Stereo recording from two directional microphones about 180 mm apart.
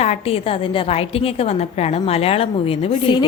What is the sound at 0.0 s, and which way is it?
A woman's voice, 35° left (ahead or behind).